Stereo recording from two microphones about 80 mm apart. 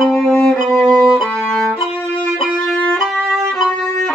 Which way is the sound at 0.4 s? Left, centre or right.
Centre.